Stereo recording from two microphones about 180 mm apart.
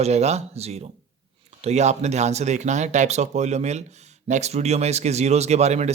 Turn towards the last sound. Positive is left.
turn(degrees=-40)  # may be behind; listen again after turning